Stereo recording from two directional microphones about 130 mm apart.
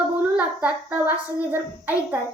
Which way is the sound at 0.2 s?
10° right (ahead or behind).